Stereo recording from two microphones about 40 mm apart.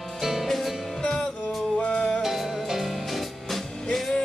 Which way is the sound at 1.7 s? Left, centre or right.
Left.